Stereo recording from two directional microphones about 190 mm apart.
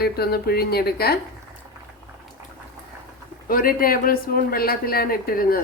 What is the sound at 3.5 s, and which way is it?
Speech, 50° left (ahead or behind).